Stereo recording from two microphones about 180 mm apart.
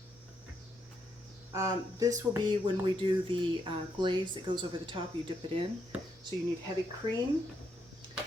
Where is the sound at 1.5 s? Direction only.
15° right (ahead or behind).